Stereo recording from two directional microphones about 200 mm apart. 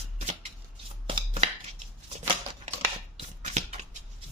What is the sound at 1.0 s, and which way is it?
Chopping, 30° right (ahead or behind).